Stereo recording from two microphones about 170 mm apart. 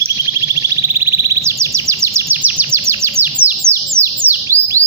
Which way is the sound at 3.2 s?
10° right (ahead or behind).